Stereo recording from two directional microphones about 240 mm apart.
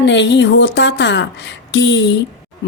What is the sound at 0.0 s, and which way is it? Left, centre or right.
Speech, left.